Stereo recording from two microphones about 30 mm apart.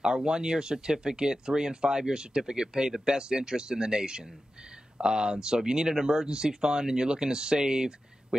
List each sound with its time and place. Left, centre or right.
0.0 s speech: right